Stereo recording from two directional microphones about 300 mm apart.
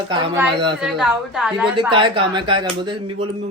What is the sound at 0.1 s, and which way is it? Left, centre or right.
Speech, centre.